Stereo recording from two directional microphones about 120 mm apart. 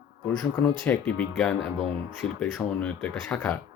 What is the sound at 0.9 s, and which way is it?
Speech, 10° left (ahead or behind).